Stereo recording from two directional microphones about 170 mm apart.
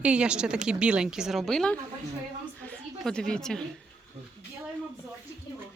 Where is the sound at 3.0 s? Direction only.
5° left (ahead or behind).